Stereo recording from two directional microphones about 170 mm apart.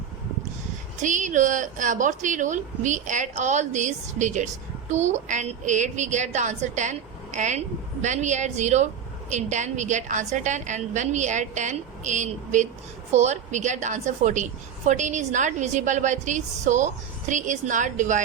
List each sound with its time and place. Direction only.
1.0 s a woman's voice: 45° right (ahead or behind)